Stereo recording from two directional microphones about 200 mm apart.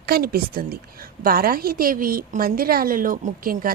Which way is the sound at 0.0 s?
50° right (ahead or behind).